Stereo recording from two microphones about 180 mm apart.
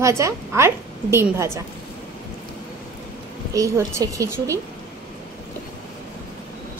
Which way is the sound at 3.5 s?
20° right (ahead or behind).